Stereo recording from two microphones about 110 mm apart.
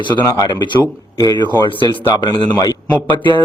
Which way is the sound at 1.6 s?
50° left (ahead or behind).